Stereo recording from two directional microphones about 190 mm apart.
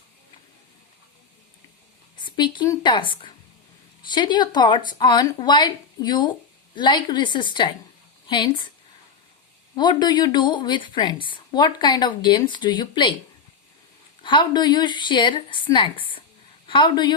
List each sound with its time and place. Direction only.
2.2 s a woman's voice: 25° left (ahead or behind)
9.7 s a woman's voice: 25° left (ahead or behind)
14.2 s a woman's voice: 25° left (ahead or behind)